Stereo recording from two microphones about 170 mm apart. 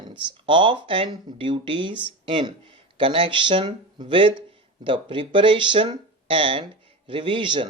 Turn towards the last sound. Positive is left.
turn(degrees=-30)  # may be behind; listen again after turning